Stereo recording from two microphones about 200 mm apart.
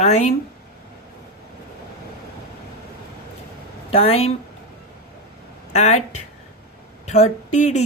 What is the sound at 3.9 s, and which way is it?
Speech, 30° left (ahead or behind).